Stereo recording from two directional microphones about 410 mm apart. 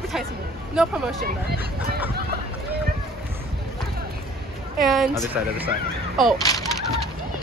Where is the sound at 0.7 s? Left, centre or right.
Centre.